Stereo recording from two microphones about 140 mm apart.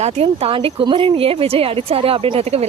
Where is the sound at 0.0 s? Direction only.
45° right (ahead or behind).